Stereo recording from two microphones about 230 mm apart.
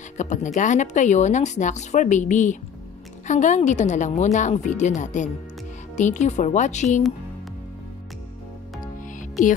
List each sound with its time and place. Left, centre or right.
0.2 s speech: left
9.0 s music: left